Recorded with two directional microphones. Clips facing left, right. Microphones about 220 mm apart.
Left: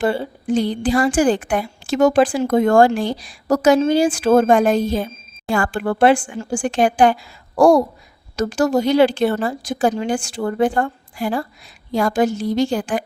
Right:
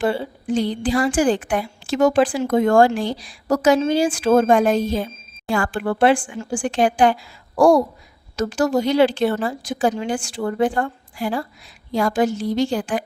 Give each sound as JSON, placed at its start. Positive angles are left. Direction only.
{"t": 0.0, "sound": "a woman's voice", "side_deg": 45}